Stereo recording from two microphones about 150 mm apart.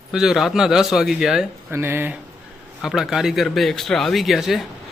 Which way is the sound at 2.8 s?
Centre (ahead or behind).